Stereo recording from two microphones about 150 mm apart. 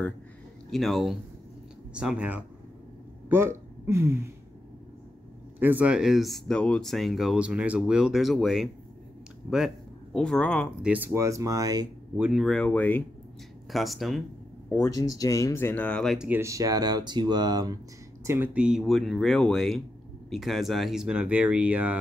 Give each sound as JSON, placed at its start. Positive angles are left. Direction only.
{"t": 0.7, "sound": "speech", "side_deg": 0}
{"t": 5.6, "sound": "speech", "side_deg": -10}
{"t": 10.1, "sound": "speech", "side_deg": 5}
{"t": 10.8, "sound": "speech", "side_deg": -10}
{"t": 12.2, "sound": "speech", "side_deg": -5}
{"t": 13.7, "sound": "speech", "side_deg": 0}
{"t": 14.7, "sound": "speech", "side_deg": 20}
{"t": 16.3, "sound": "speech", "side_deg": -20}
{"t": 18.2, "sound": "speech", "side_deg": -15}